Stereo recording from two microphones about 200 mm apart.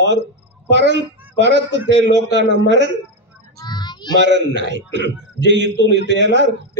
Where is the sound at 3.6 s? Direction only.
20° left (ahead or behind).